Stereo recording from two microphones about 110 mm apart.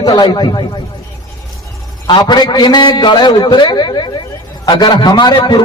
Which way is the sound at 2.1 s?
40° left (ahead or behind).